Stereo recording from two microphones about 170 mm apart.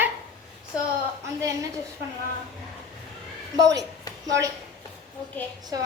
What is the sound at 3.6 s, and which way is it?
Speech, 20° right (ahead or behind).